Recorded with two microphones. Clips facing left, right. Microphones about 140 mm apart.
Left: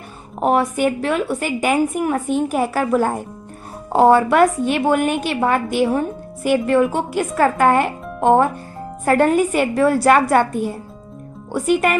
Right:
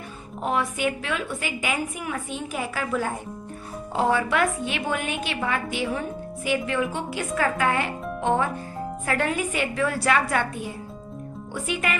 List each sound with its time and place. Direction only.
0.3 s a woman's voice: 55° left (ahead or behind)